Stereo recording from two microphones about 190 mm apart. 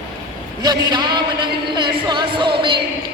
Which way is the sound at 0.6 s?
20° right (ahead or behind).